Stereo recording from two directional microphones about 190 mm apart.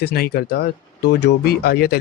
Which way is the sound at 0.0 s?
55° left (ahead or behind).